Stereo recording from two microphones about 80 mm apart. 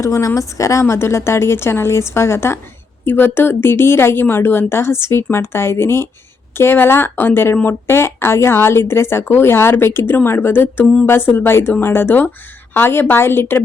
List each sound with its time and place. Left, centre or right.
0.0 s a woman's voice: left